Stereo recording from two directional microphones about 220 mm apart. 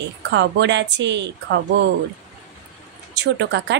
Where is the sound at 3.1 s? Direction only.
50° right (ahead or behind).